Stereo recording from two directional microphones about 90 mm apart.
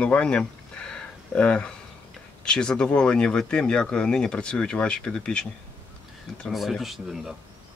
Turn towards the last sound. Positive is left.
turn(degrees=0)  # may be behind; listen again after turning